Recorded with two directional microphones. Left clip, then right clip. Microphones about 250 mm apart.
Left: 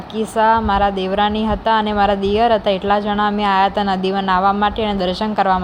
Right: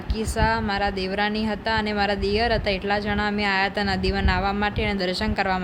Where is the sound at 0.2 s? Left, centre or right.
Centre.